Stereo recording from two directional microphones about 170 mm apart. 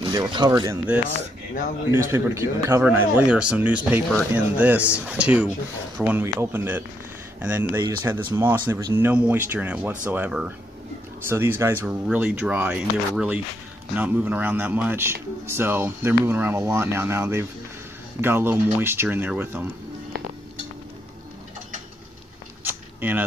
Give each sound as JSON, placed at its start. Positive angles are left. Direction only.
{"t": 0.0, "sound": "speech", "side_deg": -25}
{"t": 1.9, "sound": "speech", "side_deg": -15}
{"t": 22.6, "sound": "a sound", "side_deg": -10}